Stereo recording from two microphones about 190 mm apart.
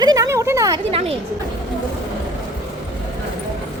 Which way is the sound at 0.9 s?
30° right (ahead or behind).